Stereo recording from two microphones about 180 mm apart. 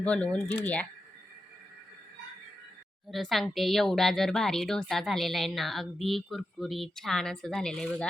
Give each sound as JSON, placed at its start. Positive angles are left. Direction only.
{"t": 0.0, "sound": "speech", "side_deg": 5}
{"t": 3.1, "sound": "speech", "side_deg": 0}